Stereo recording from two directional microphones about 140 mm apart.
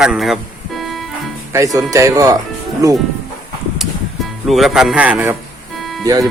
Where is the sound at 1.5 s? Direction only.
20° right (ahead or behind).